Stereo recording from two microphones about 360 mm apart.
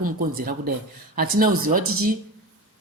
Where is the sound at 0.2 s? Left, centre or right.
Right.